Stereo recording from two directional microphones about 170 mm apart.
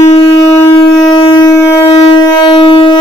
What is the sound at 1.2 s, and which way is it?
Wind instrument, 30° left (ahead or behind).